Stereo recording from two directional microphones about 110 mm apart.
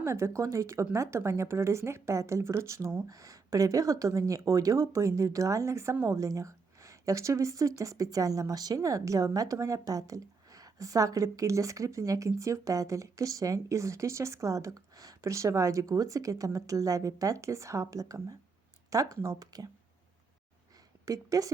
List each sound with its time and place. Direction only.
0.0 s speech: 25° right (ahead or behind)
21.0 s a woman's voice: 30° right (ahead or behind)